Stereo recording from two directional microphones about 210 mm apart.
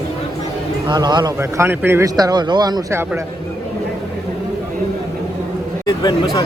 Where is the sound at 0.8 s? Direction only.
20° right (ahead or behind).